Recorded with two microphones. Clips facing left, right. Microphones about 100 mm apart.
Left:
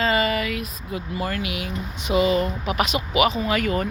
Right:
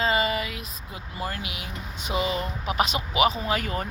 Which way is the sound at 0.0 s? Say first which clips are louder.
Left 3 dB; 25° right (ahead or behind).